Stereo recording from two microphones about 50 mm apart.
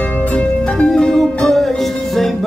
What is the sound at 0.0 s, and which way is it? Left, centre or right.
Music, left.